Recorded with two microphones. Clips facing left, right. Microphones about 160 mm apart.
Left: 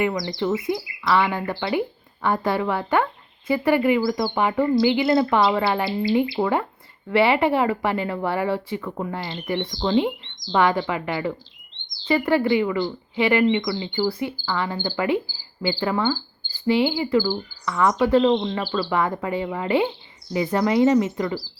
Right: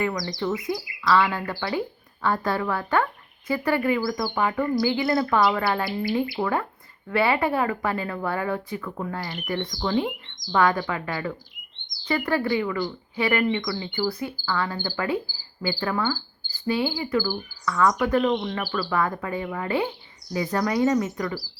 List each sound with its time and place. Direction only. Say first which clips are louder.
0.0 s a woman's voice: left 3 dB; 25° left (ahead or behind)